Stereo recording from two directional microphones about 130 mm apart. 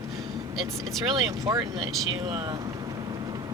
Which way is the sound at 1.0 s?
30° right (ahead or behind).